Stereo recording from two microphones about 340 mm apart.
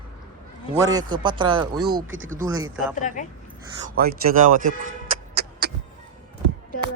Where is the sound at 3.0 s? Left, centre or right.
Left.